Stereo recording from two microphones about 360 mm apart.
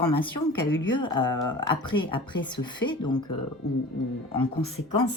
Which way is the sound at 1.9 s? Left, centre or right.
Left.